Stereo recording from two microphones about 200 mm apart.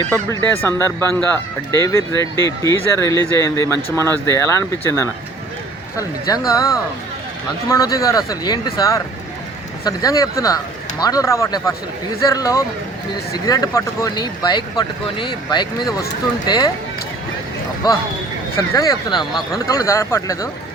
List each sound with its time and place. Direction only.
0.1 s speech: 10° left (ahead or behind)
7.7 s speech: 15° left (ahead or behind)
17.8 s speech: 20° left (ahead or behind)